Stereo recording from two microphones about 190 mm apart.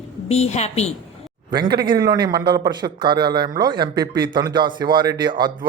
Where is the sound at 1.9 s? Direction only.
20° right (ahead or behind).